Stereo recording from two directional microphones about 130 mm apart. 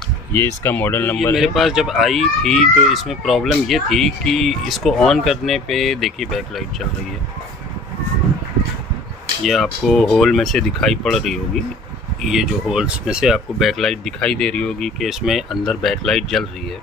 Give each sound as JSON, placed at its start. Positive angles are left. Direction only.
{"t": 0.3, "sound": "speech", "side_deg": 20}
{"t": 1.3, "sound": "speech", "side_deg": 0}
{"t": 9.4, "sound": "speech", "side_deg": 0}